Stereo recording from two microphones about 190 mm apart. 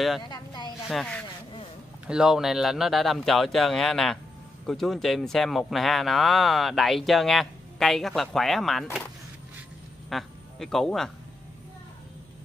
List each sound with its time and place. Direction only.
0.3 s speech: 20° left (ahead or behind)
0.8 s speech: centre (ahead or behind)
10.0 s speech: centre (ahead or behind)